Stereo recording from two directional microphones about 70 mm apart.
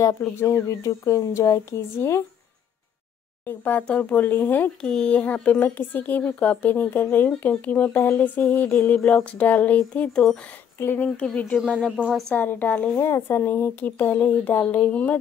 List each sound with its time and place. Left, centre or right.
0.0 s speech: left
3.4 s speech: left
4.8 s speech: centre
8.6 s speech: left
8.9 s speech: centre
12.9 s speech: left